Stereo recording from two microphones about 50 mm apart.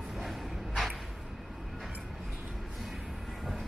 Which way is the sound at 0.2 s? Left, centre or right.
Centre.